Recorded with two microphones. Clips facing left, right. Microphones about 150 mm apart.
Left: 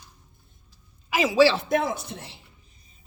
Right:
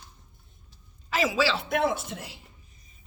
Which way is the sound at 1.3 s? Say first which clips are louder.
Left 7 dB; 40° left (ahead or behind).